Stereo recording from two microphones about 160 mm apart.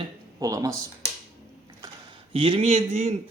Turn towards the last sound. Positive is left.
turn(degrees=-40)  # may be behind; listen again after turning